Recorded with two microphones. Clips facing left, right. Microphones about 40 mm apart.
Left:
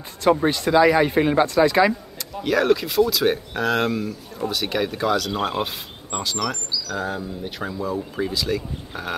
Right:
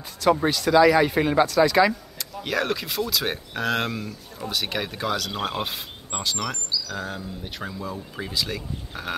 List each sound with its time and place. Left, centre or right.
0.5 s speech: left
0.7 s speech: centre
2.1 s speech: centre